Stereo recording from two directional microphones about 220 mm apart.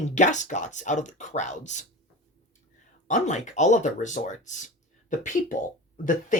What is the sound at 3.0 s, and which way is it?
Speech, 35° left (ahead or behind).